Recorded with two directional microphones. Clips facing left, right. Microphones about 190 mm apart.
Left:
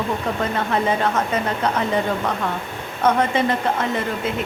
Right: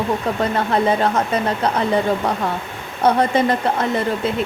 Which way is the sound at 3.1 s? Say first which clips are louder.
Right 3 dB; 35° right (ahead or behind).